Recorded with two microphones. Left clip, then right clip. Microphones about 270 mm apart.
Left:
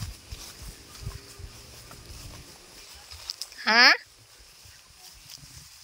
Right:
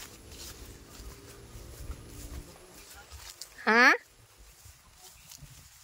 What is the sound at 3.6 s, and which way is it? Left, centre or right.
Speech, centre.